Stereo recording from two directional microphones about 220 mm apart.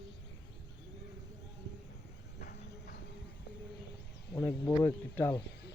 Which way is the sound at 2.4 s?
45° left (ahead or behind).